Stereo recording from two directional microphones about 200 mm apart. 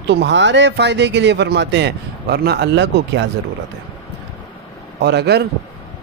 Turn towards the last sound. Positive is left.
turn(degrees=-55)  # may be behind; listen again after turning